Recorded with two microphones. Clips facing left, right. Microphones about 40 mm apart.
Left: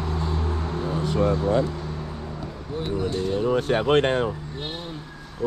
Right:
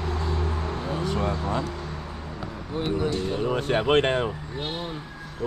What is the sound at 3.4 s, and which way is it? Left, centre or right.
Speech, right.